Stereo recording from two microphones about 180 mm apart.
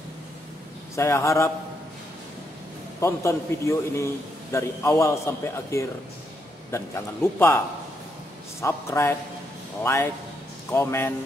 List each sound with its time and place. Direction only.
0.9 s a man's voice: 15° left (ahead or behind)
3.0 s a man's voice: 15° left (ahead or behind)